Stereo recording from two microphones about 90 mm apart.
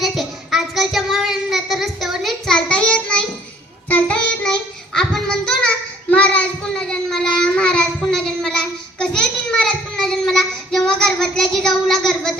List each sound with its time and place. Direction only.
0.0 s child singing: centre (ahead or behind)
2.5 s child singing: 10° left (ahead or behind)
4.4 s child singing: 5° left (ahead or behind)